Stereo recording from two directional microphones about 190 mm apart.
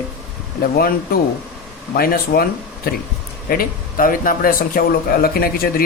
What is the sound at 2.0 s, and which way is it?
Speech, 50° left (ahead or behind).